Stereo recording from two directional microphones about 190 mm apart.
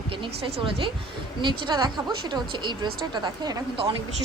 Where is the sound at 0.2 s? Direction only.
25° right (ahead or behind).